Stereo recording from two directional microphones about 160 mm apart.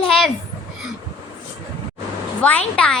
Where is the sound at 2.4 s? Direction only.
10° left (ahead or behind).